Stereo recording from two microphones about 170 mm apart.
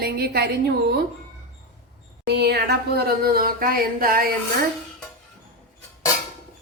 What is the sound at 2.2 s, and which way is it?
A woman's voice, 75° right (ahead or behind).